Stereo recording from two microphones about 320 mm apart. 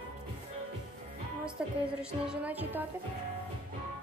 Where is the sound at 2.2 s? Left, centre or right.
Centre.